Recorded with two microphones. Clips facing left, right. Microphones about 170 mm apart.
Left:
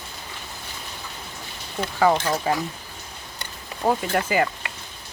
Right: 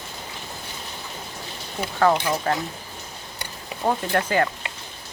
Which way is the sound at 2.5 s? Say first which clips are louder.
Left 1 dB; 10° left (ahead or behind).